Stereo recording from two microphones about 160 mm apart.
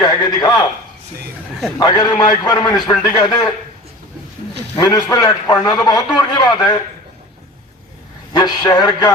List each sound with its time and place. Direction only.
0.0 s a sound: 25° left (ahead or behind)
1.8 s a man's voice: 25° left (ahead or behind)
4.8 s a man's voice: 25° left (ahead or behind)
8.3 s a man's voice: 25° left (ahead or behind)